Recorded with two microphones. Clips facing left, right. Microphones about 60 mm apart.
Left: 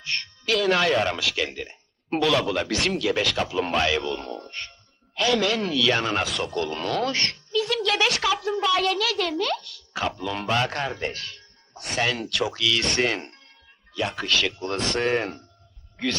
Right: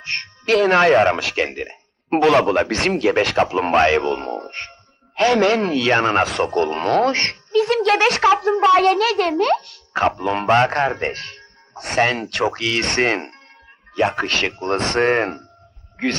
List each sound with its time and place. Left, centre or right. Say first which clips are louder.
0.0 s speech: right 4 dB; right